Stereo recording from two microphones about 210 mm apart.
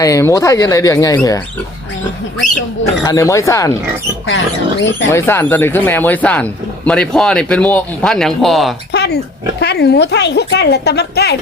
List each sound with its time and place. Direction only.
0.0 s speech: 15° left (ahead or behind)
3.0 s speech: 15° left (ahead or behind)
5.1 s speech: 10° left (ahead or behind)
8.9 s oink: 55° left (ahead or behind)
9.6 s a woman's voice: 50° left (ahead or behind)